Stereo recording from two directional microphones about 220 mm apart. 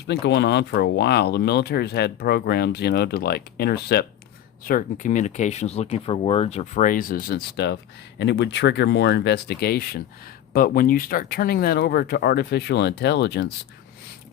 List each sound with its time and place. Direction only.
0.1 s speech: 50° left (ahead or behind)